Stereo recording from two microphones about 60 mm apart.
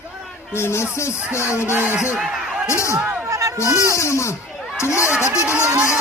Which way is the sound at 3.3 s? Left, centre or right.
Right.